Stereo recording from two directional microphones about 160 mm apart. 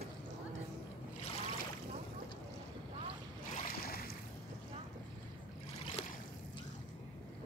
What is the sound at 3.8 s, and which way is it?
Boat, 70° left (ahead or behind).